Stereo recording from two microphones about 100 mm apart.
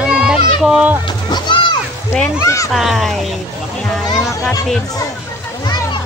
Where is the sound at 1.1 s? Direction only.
50° left (ahead or behind).